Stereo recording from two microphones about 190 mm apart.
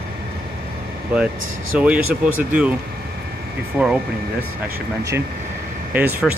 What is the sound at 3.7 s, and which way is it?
Speech, 5° right (ahead or behind).